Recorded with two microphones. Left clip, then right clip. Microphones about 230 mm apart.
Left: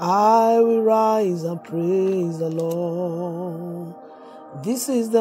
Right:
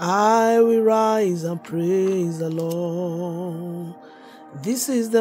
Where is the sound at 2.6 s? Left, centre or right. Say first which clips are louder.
Left 1 dB; centre.